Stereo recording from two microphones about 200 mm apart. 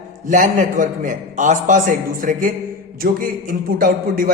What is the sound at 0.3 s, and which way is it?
A man's voice, 40° right (ahead or behind).